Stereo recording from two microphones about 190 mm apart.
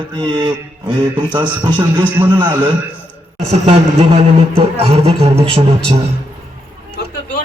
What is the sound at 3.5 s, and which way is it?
A man's voice, 35° right (ahead or behind).